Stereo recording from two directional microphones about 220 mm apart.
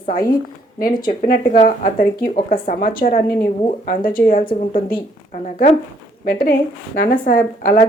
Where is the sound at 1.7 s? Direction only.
40° left (ahead or behind).